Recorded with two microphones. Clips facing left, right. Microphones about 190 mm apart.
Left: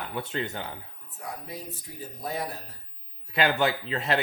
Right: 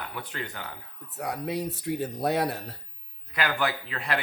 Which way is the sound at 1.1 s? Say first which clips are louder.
Right 8 dB; 70° right (ahead or behind).